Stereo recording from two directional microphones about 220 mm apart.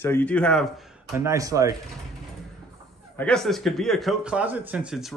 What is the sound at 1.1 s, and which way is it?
Speech, 15° right (ahead or behind).